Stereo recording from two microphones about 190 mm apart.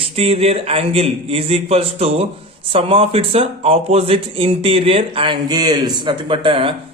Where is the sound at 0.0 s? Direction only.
30° right (ahead or behind).